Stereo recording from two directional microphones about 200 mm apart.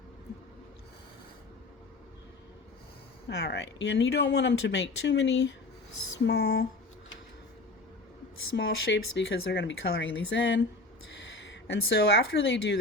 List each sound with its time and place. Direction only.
3.2 s speech: 60° left (ahead or behind)
8.5 s speech: 60° left (ahead or behind)